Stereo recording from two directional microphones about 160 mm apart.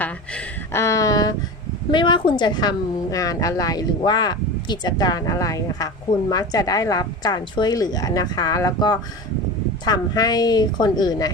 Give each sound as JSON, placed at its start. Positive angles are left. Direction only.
{"t": 0.0, "sound": "a woman's voice", "side_deg": 15}